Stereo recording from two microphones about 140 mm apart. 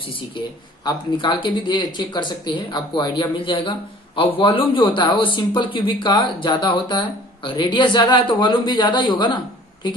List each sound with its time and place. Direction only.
0.8 s speech: 35° left (ahead or behind)